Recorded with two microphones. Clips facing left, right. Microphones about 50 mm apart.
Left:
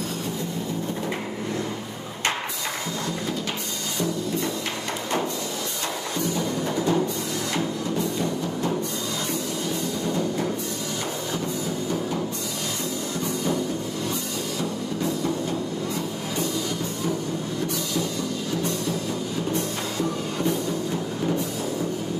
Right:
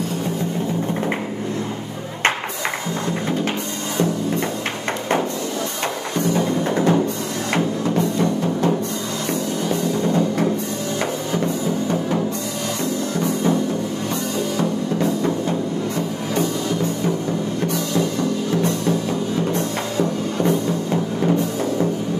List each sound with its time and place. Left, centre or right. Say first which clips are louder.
6.3 s music: right 8 dB; right
10.0 s music: right 5 dB; right
14.6 s music: right 6 dB; right
19.5 s music: right 5 dB; right